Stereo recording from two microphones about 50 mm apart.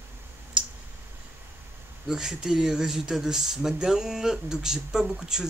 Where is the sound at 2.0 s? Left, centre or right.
Centre.